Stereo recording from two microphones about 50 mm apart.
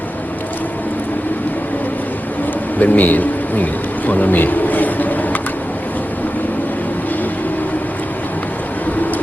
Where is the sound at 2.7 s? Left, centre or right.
Left.